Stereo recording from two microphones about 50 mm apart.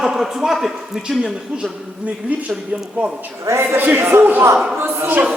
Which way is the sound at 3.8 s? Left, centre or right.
Right.